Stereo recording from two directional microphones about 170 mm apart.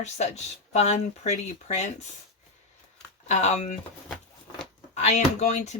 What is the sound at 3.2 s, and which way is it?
Speech, 40° left (ahead or behind).